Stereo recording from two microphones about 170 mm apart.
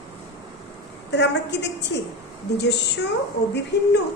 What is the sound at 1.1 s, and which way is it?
A woman's voice, 90° left.